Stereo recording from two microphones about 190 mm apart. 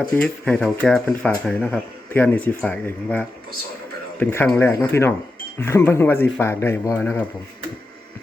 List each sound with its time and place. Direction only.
0.0 s speech: 5° left (ahead or behind)